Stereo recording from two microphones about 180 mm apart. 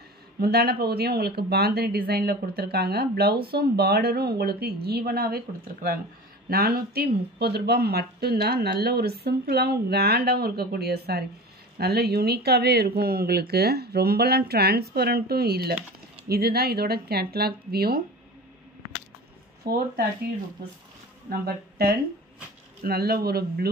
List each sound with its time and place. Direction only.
0.4 s speech: 60° right (ahead or behind)
19.6 s speech: 60° right (ahead or behind)
21.3 s speech: 60° right (ahead or behind)